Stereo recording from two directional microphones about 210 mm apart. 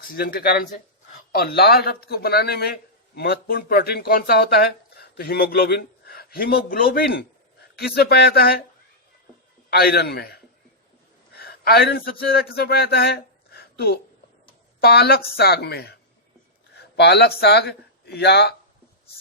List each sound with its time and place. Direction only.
0.2 s speech: 45° left (ahead or behind)
9.6 s speech: 50° left (ahead or behind)
11.3 s speech: 50° left (ahead or behind)